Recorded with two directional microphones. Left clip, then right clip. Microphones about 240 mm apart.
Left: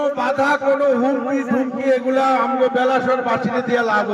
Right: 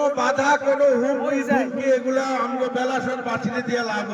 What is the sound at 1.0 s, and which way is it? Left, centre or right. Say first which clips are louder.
A man's voice: left 2 dB; centre.